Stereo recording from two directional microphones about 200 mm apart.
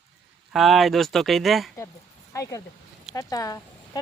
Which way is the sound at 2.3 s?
15° left (ahead or behind).